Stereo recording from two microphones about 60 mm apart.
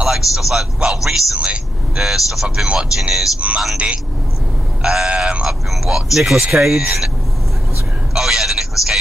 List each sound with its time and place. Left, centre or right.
0.0 s speech: centre
0.7 s speech: centre
2.0 s a man's voice: centre
8.1 s speech: centre